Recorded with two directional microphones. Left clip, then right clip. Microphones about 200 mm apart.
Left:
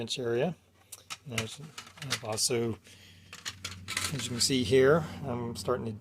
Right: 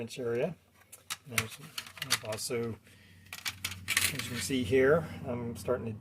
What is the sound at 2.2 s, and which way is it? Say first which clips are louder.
Speech: left 4 dB; 45° left (ahead or behind).